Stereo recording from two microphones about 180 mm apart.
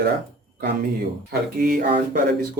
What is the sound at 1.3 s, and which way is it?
Speech, 50° right (ahead or behind).